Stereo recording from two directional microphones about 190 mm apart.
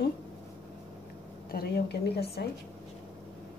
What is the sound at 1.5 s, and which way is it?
Speech, 55° left (ahead or behind).